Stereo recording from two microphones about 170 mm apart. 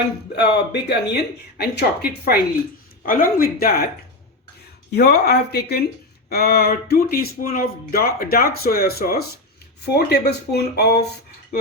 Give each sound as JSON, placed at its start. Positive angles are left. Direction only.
{"t": 0.3, "sound": "speech", "side_deg": 80}
{"t": 3.1, "sound": "speech", "side_deg": 55}
{"t": 4.9, "sound": "speech", "side_deg": 70}